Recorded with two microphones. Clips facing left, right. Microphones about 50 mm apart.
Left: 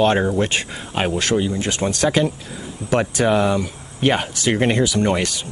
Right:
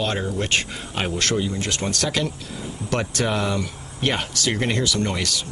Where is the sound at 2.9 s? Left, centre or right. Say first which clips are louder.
Left 6 dB; centre.